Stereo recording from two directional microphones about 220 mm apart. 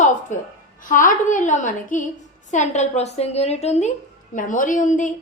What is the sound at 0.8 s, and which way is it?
A woman's voice, 35° left (ahead or behind).